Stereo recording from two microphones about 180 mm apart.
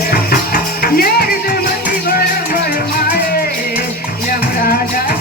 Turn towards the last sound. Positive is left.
turn(degrees=55)  # may be behind; listen again after turning